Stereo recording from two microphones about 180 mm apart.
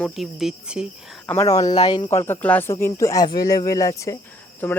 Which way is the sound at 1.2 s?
15° left (ahead or behind).